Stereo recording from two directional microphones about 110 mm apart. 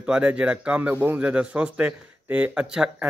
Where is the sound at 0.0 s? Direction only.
10° right (ahead or behind).